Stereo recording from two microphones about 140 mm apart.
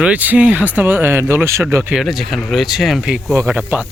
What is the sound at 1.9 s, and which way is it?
Speech, centre (ahead or behind).